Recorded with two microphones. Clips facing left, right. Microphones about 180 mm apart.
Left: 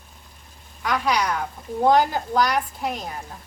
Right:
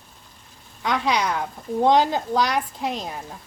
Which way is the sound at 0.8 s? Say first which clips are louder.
Even; 25° right (ahead or behind).